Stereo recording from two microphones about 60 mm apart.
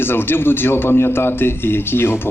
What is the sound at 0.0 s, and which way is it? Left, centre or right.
A man's voice, left.